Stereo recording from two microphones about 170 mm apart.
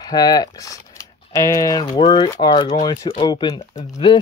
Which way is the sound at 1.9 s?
35° left (ahead or behind).